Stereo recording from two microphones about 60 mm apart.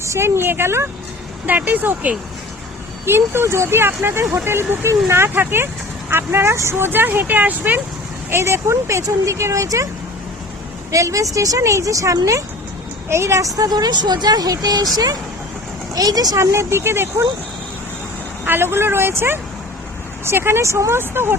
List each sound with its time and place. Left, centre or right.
0.0 s speech: right
1.5 s speech: right
3.1 s speech: right
5.3 s speech: right
8.3 s speech: right
10.9 s speech: right
13.1 s a woman's voice: right
16.4 s speech: right
18.4 s speech: right